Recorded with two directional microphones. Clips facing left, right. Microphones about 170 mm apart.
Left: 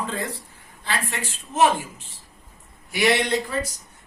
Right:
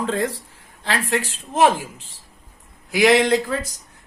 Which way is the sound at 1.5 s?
90° right.